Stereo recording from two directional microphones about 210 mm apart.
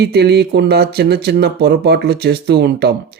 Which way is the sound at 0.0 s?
50° right (ahead or behind).